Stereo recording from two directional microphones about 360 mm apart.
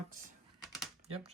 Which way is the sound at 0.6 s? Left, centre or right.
Centre.